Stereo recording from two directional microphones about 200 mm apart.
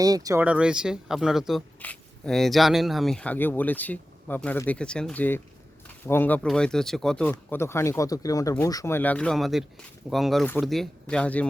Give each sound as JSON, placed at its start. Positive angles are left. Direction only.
{"t": 0.0, "sound": "speech", "side_deg": -20}
{"t": 0.4, "sound": "speech", "side_deg": -5}